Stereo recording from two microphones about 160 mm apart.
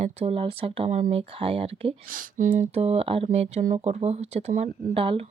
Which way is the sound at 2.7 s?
40° right (ahead or behind).